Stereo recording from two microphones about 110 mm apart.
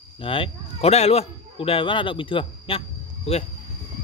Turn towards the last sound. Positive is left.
turn(degrees=60)  # may be behind; listen again after turning